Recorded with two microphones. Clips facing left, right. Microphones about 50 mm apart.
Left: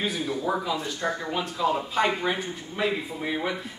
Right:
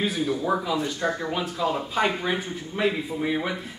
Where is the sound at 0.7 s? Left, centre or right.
Right.